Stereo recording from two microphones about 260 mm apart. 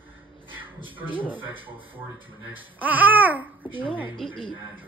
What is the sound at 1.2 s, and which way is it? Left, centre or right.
Speech, centre.